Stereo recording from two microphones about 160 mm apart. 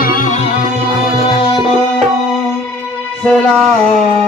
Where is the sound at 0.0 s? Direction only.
60° left (ahead or behind).